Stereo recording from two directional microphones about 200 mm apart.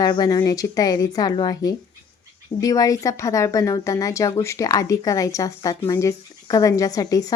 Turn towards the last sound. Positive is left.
turn(degrees=20)  # may be behind; listen again after turning